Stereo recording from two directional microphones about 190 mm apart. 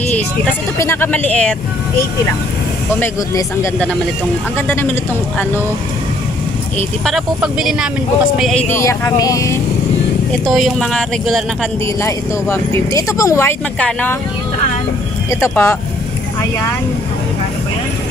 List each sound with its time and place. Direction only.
0.7 s speech: 10° left (ahead or behind)
3.0 s speech: 10° left (ahead or behind)
7.1 s speech: centre (ahead or behind)
8.7 s speech: 15° left (ahead or behind)
10.4 s speech: centre (ahead or behind)
12.0 s speech: 15° left (ahead or behind)
15.4 s speech: 15° left (ahead or behind)